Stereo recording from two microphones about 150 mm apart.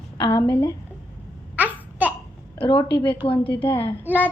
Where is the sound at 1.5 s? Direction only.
10° right (ahead or behind).